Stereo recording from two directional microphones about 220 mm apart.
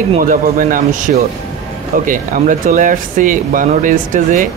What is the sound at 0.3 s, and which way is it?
Speech, 40° right (ahead or behind).